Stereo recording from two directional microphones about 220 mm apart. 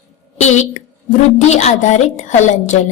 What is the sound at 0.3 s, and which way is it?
A woman's voice, 30° left (ahead or behind).